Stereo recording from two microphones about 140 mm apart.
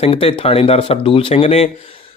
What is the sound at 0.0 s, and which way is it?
Speech, 45° left (ahead or behind).